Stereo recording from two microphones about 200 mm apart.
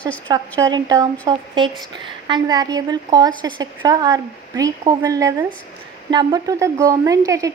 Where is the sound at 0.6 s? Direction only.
15° right (ahead or behind).